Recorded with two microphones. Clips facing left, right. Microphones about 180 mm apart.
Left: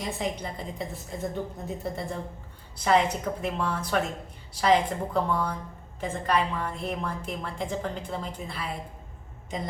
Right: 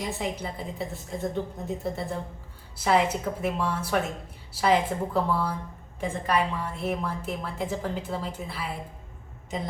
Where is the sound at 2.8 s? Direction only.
5° right (ahead or behind).